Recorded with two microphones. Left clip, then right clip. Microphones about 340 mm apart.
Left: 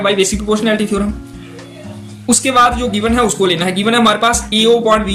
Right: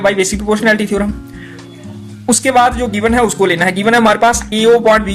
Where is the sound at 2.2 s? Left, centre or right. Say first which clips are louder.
Right 1 dB; right.